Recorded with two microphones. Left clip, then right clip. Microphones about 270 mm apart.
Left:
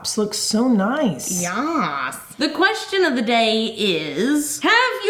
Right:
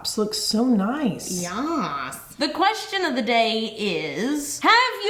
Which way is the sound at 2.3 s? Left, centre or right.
Right.